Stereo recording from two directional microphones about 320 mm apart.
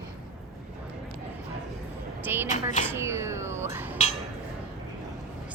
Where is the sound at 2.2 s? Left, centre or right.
Centre.